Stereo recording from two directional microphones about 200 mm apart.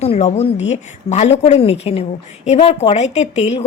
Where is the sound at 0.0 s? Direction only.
35° left (ahead or behind).